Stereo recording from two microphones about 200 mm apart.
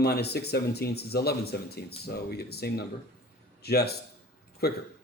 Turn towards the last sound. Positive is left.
turn(degrees=50)  # may be behind; listen again after turning